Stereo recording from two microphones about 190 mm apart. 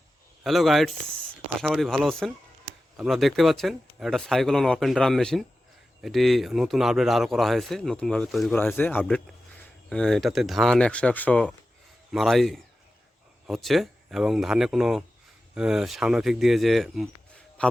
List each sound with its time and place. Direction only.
0.4 s a man's voice: centre (ahead or behind)